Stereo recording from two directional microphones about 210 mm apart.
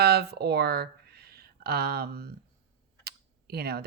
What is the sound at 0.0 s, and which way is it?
Speech, 50° right (ahead or behind).